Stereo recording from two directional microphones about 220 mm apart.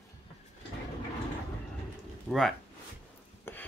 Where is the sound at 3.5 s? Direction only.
10° left (ahead or behind).